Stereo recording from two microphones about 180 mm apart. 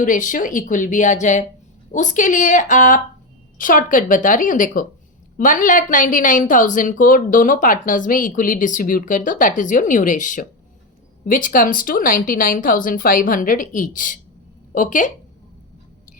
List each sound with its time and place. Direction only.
0.0 s a woman's voice: 45° left (ahead or behind)